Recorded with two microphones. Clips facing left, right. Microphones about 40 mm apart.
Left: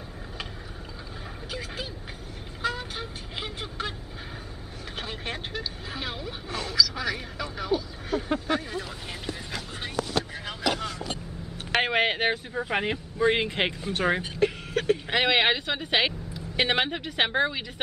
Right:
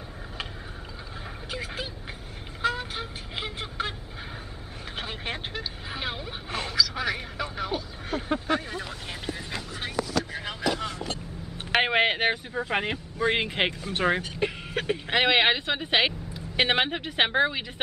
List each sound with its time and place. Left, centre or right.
1.5 s speech: centre
2.6 s music: centre
4.9 s speech: centre
11.7 s speech: centre
14.4 s speech: centre